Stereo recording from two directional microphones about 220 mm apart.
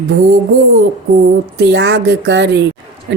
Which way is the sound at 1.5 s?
50° right (ahead or behind).